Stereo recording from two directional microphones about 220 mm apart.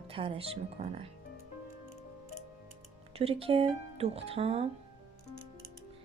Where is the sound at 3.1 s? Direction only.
25° right (ahead or behind).